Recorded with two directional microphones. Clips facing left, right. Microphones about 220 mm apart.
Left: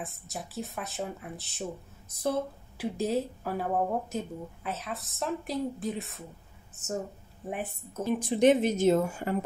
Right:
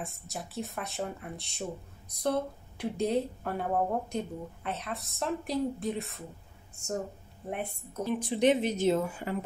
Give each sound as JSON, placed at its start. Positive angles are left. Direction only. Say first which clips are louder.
{"t": 0.0, "sound": "a woman's voice", "louder": "even", "side_deg": 0}
{"t": 8.0, "sound": "speech", "louder": "left 3 dB", "side_deg": 45}